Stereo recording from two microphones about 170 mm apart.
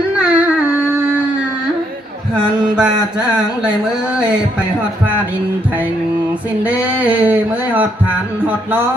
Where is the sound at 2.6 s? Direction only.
5° right (ahead or behind).